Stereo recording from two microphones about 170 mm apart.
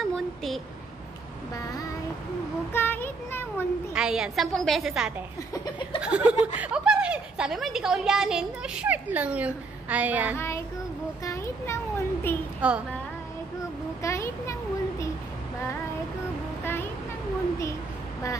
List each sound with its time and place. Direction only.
0.1 s a sound: centre (ahead or behind)
1.6 s child singing: 20° left (ahead or behind)
2.7 s a child's voice: 15° left (ahead or behind)
3.9 s a woman's voice: 5° right (ahead or behind)
10.3 s a child's voice: 15° left (ahead or behind)
12.6 s speech: 5° right (ahead or behind)
14.0 s a child's voice: 15° left (ahead or behind)